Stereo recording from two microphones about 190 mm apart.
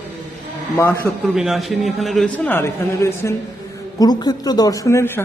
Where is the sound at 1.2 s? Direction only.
Centre (ahead or behind).